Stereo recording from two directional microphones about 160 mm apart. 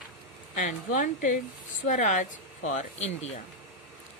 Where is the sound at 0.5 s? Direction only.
50° left (ahead or behind).